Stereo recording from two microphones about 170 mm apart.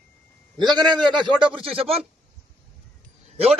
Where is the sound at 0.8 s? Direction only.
Centre (ahead or behind).